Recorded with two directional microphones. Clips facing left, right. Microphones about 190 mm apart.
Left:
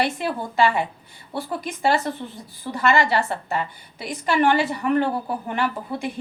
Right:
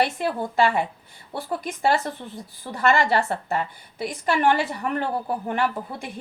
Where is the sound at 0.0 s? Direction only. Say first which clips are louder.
Right 1 dB; 50° right (ahead or behind).